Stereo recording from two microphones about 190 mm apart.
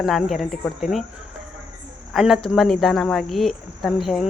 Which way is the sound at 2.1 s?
Centre (ahead or behind).